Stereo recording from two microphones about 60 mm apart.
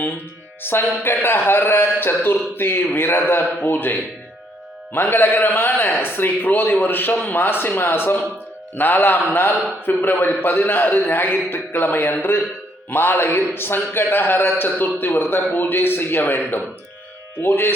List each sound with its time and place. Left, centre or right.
0.6 s speech: left